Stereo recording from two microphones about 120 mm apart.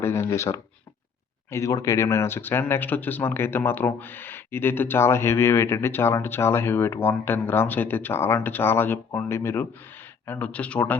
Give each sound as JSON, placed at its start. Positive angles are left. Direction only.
{"t": 0.0, "sound": "speech", "side_deg": 20}